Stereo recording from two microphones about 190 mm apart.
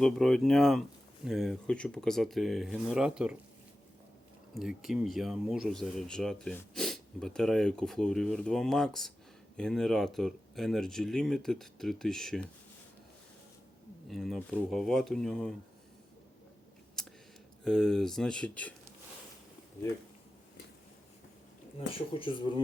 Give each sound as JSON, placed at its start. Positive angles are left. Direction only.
{"t": 0.0, "sound": "speech", "side_deg": 0}
{"t": 4.5, "sound": "speech", "side_deg": 0}
{"t": 14.1, "sound": "speech", "side_deg": 0}
{"t": 17.0, "sound": "a sound", "side_deg": 5}
{"t": 17.6, "sound": "speech", "side_deg": 5}
{"t": 21.8, "sound": "speech", "side_deg": 30}